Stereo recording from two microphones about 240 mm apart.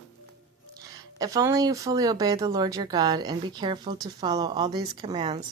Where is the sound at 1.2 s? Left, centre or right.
Centre.